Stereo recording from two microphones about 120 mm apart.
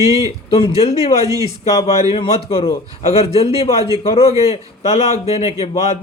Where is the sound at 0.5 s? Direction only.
55° left (ahead or behind).